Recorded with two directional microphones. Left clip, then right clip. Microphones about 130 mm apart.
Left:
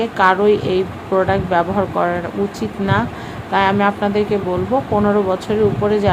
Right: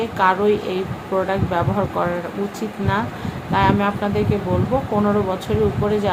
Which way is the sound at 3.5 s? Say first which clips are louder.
Left 3 dB; 30° left (ahead or behind).